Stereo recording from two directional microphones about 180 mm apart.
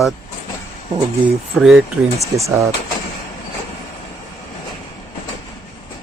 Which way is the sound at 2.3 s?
15° right (ahead or behind).